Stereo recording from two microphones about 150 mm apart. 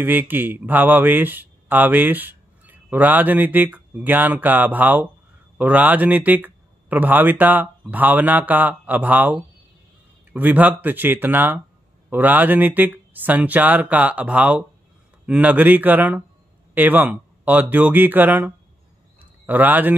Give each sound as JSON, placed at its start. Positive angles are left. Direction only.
{"t": 0.0, "sound": "speech", "side_deg": -10}